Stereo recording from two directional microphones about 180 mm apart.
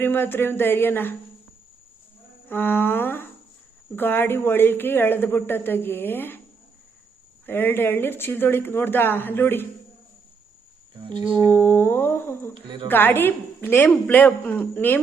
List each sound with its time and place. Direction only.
0.0 s speech: 10° left (ahead or behind)
2.5 s speech: 10° left (ahead or behind)
7.4 s speech: 10° left (ahead or behind)
11.0 s whale vocalization: 25° right (ahead or behind)
11.5 s speech: 10° left (ahead or behind)